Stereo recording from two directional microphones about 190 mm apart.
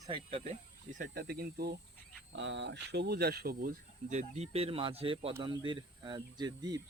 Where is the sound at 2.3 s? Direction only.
70° right (ahead or behind).